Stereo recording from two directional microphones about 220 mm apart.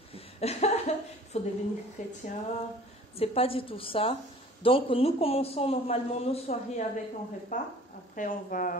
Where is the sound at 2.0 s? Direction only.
35° left (ahead or behind).